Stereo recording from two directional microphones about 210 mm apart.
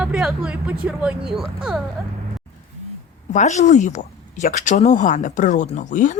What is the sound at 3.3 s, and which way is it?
Speech, 35° left (ahead or behind).